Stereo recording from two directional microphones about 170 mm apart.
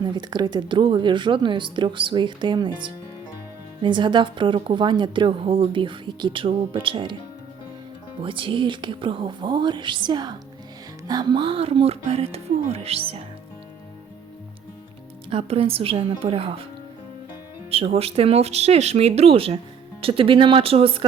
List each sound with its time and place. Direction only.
0.0 s speech: 25° right (ahead or behind)
8.2 s speech: 30° right (ahead or behind)
15.3 s speech: 35° right (ahead or behind)
17.7 s speech: 35° right (ahead or behind)